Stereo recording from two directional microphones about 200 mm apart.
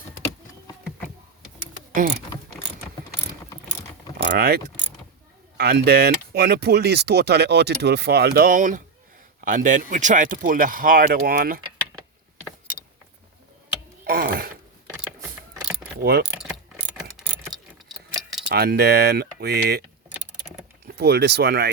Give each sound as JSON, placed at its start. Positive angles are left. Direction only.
{"t": 4.3, "sound": "speech", "side_deg": -50}
{"t": 14.0, "sound": "mechanisms", "side_deg": -50}
{"t": 16.0, "sound": "speech", "side_deg": -55}
{"t": 16.3, "sound": "ratchet", "side_deg": -5}
{"t": 18.5, "sound": "speech", "side_deg": -55}
{"t": 20.8, "sound": "speech", "side_deg": -55}